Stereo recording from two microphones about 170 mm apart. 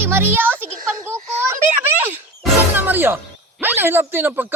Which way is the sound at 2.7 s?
10° right (ahead or behind).